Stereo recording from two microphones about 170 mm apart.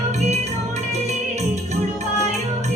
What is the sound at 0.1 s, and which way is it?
Music, 40° right (ahead or behind).